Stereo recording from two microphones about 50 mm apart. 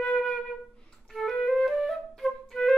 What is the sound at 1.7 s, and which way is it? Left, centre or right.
Flute, centre.